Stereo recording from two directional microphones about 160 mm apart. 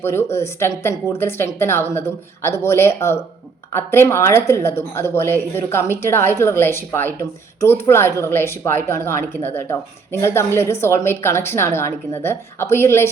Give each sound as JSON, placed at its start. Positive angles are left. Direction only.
{"t": 0.0, "sound": "speech", "side_deg": 15}